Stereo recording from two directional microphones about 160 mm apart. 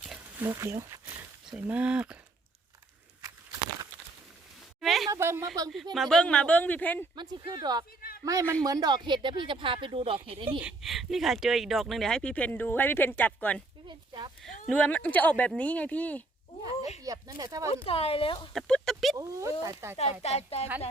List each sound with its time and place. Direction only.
0.0 s a sound: 5° right (ahead or behind)
1.5 s speech: 10° right (ahead or behind)
4.8 s a sound: centre (ahead or behind)
5.1 s speech: 15° right (ahead or behind)
5.9 s speech: centre (ahead or behind)
7.2 s speech: 25° right (ahead or behind)
10.6 s speech: 5° right (ahead or behind)
13.8 s speech: 30° right (ahead or behind)
14.7 s speech: 10° left (ahead or behind)
17.0 s speech: 20° right (ahead or behind)
17.8 s speech: 35° left (ahead or behind)
18.5 s speech: centre (ahead or behind)
19.1 s speech: 20° right (ahead or behind)
20.2 s speech: 40° left (ahead or behind)